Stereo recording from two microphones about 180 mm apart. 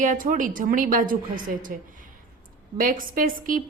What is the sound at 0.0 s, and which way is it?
A woman's voice, 50° right (ahead or behind).